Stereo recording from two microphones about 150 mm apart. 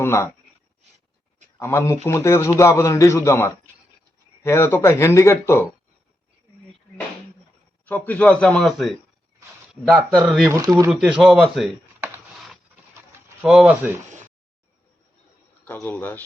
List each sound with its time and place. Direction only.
0.0 s a man's voice: 20° left (ahead or behind)
1.5 s a man's voice: 15° left (ahead or behind)
7.9 s a man's voice: 10° left (ahead or behind)
11.9 s a sound: 15° right (ahead or behind)
13.1 s speech: 10° right (ahead or behind)
15.6 s a man's voice: 10° left (ahead or behind)